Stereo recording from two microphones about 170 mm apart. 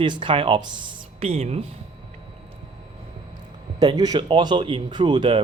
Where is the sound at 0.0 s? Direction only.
30° right (ahead or behind).